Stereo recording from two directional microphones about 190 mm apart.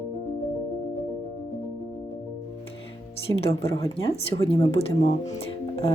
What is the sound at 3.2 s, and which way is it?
Music, 30° left (ahead or behind).